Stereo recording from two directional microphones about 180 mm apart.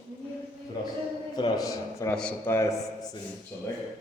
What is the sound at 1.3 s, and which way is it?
A man's voice, 20° left (ahead or behind).